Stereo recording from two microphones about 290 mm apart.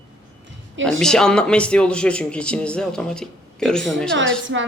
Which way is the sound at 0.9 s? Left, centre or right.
Centre.